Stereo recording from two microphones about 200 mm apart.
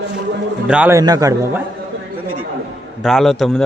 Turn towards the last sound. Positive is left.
turn(degrees=0)  # may be behind; listen again after turning